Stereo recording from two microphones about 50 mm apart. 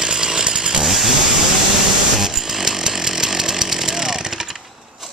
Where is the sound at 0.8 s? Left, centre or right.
Centre.